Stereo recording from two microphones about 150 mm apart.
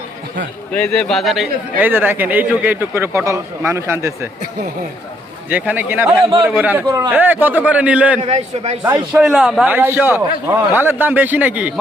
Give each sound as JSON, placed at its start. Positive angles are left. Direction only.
{"t": 0.7, "sound": "a man's voice", "side_deg": 10}
{"t": 1.8, "sound": "a man's voice", "side_deg": -15}
{"t": 5.5, "sound": "a man's voice", "side_deg": -10}
{"t": 6.8, "sound": "a man's voice", "side_deg": -25}
{"t": 7.1, "sound": "a man's voice", "side_deg": -10}
{"t": 8.2, "sound": "a man's voice", "side_deg": -45}
{"t": 8.8, "sound": "a man's voice", "side_deg": -10}
{"t": 9.7, "sound": "a man's voice", "side_deg": -15}